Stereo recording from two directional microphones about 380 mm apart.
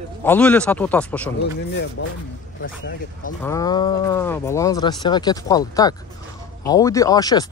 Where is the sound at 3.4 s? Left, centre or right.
Centre.